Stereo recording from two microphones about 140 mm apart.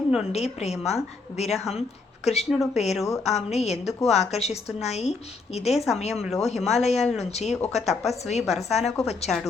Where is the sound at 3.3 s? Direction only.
50° left (ahead or behind).